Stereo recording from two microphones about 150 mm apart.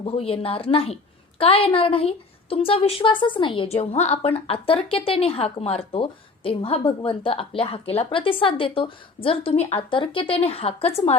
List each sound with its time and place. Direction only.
0.0 s a woman's voice: 40° left (ahead or behind)